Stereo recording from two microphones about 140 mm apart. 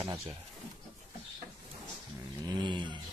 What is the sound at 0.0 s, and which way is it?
Speech, 25° right (ahead or behind).